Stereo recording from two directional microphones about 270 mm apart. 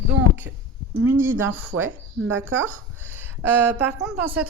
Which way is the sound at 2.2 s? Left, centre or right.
Right.